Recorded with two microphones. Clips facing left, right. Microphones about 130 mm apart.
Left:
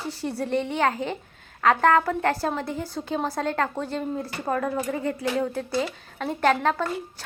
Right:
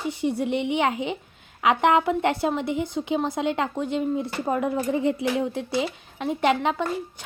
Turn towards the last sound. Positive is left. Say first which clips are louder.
# even
turn(degrees=-15)  # may be behind; listen again after turning